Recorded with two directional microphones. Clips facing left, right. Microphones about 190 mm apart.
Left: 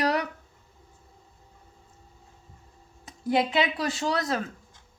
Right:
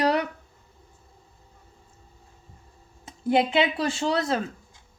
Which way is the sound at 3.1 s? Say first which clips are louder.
Right 3 dB; 25° right (ahead or behind).